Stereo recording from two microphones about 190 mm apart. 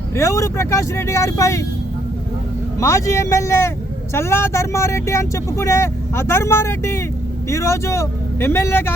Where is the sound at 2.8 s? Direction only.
15° left (ahead or behind).